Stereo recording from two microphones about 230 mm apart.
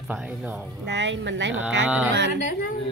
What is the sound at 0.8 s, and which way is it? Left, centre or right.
Speech, right.